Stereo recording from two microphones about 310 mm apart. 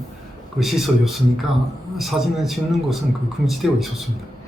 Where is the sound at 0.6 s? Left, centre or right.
Centre.